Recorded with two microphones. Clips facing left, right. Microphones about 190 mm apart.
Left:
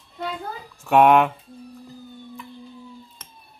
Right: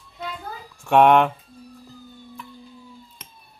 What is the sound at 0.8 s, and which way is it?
Speech, 5° left (ahead or behind).